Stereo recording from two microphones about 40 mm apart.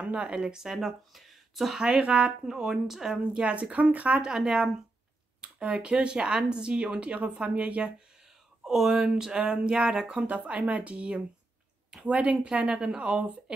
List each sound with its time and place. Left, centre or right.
0.0 s a woman's voice: right
0.6 s speech: centre
1.8 s speech: right; by 3.2 s centre
3.3 s speech: right
4.2 s speech: centre
5.6 s speech: right
5.9 s a woman's voice: right
8.6 s speech: centre
9.0 s a woman's voice: centre
10.2 s a woman's voice: right